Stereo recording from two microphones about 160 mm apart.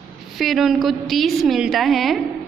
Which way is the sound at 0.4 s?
Centre (ahead or behind).